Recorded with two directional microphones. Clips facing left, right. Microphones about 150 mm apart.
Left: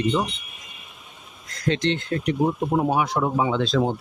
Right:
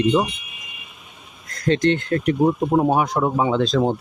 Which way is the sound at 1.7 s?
50° right (ahead or behind).